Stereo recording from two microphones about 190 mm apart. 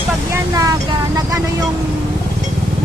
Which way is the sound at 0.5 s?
15° right (ahead or behind).